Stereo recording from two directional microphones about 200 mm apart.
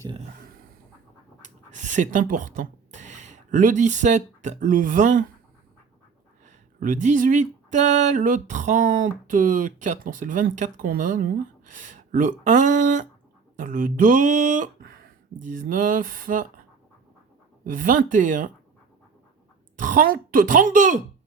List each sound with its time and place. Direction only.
1.7 s speech: 40° right (ahead or behind)
6.4 s speech: 40° right (ahead or behind)
17.6 s speech: 40° right (ahead or behind)
19.8 s speech: 40° right (ahead or behind)